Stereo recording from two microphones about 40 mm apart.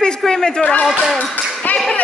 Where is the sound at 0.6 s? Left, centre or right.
Left.